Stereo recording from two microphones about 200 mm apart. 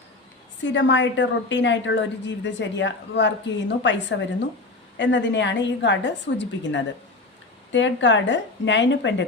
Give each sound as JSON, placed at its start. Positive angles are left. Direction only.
{"t": 0.6, "sound": "a woman's voice", "side_deg": 65}